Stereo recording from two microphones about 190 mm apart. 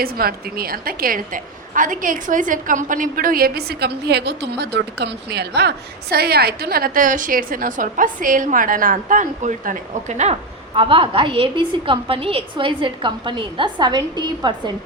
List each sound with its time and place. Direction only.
0.0 s a woman's voice: 50° right (ahead or behind)
10.8 s a woman's voice: 30° right (ahead or behind)